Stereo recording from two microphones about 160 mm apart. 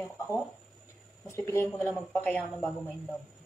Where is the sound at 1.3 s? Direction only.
15° left (ahead or behind); by 2.9 s centre (ahead or behind).